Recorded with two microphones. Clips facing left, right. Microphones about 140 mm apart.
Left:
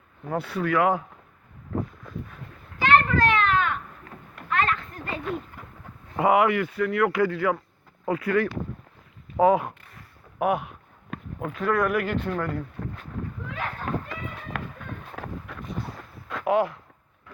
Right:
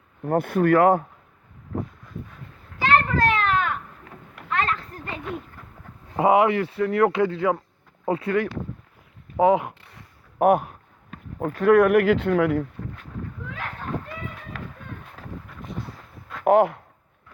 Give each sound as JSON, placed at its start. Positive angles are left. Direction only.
{"t": 0.3, "sound": "speech", "side_deg": -50}
{"t": 2.8, "sound": "children playing", "side_deg": -35}
{"t": 6.1, "sound": "speech", "side_deg": -25}
{"t": 10.3, "sound": "speech", "side_deg": -45}
{"t": 11.6, "sound": "speech", "side_deg": -60}
{"t": 13.9, "sound": "run", "side_deg": 75}
{"t": 14.5, "sound": "run", "side_deg": 60}
{"t": 15.1, "sound": "a sound", "side_deg": 70}
{"t": 16.4, "sound": "speech", "side_deg": -55}